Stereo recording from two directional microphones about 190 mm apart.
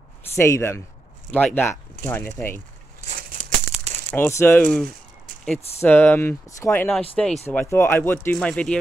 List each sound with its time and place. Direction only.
0.4 s speech: 15° left (ahead or behind)
3.1 s maraca: 40° right (ahead or behind)
4.1 s speech: 10° left (ahead or behind)